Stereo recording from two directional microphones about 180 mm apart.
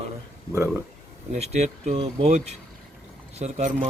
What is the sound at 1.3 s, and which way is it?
Speech, 40° right (ahead or behind).